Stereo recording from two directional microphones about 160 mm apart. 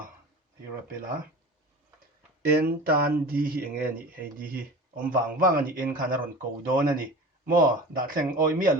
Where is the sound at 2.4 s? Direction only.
75° right (ahead or behind).